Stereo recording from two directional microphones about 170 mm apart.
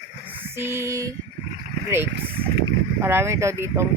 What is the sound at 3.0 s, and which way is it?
Speech, 15° right (ahead or behind).